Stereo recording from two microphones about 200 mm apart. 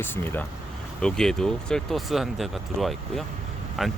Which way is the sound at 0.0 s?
10° left (ahead or behind).